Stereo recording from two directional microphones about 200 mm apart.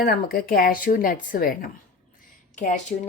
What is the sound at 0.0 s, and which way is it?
Speech, 50° left (ahead or behind).